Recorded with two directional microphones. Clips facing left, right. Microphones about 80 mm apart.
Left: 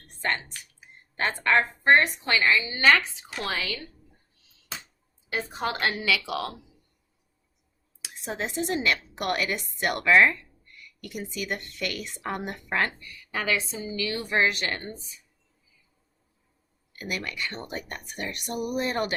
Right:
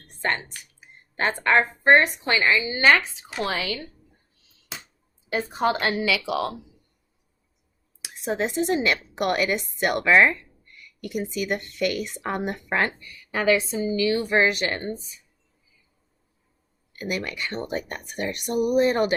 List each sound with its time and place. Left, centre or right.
0.2 s speech: right
5.9 s speech: centre
8.3 s speech: right
17.0 s speech: right